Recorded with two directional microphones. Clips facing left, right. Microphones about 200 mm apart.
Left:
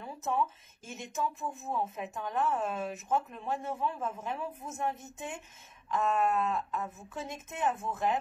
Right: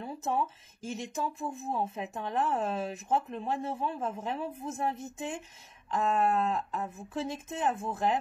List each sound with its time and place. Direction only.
0.0 s speech: 30° right (ahead or behind)